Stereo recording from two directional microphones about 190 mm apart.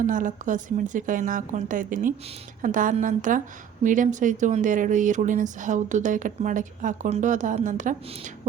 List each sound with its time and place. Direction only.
0.0 s speech: 45° right (ahead or behind)